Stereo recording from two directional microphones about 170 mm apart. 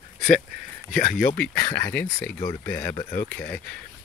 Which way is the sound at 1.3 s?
10° left (ahead or behind).